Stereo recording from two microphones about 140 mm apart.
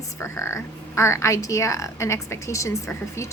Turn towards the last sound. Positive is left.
turn(degrees=20)  # may be behind; listen again after turning